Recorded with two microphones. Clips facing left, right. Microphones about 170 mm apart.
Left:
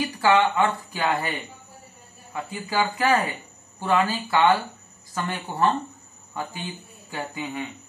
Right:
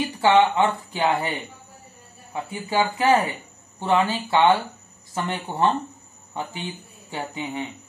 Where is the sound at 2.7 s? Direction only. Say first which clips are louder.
Right 3 dB; 25° right (ahead or behind).